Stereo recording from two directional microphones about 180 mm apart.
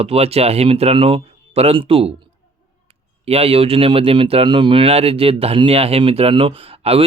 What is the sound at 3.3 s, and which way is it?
Speech, 35° right (ahead or behind).